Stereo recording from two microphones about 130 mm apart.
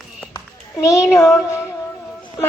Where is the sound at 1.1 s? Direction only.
20° left (ahead or behind).